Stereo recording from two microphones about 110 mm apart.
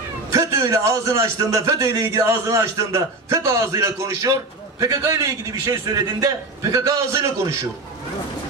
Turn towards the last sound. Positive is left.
turn(degrees=-30)  # may be behind; listen again after turning